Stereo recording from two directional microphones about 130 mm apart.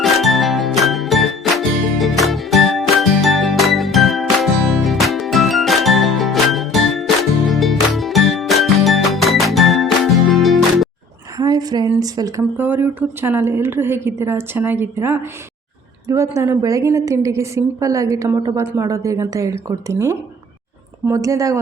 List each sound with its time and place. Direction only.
0.0 s music: centre (ahead or behind)
11.3 s a sound: 30° right (ahead or behind)
12.5 s a woman's voice: 15° right (ahead or behind)